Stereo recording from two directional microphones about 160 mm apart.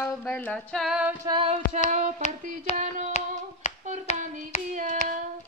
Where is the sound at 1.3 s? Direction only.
30° right (ahead or behind).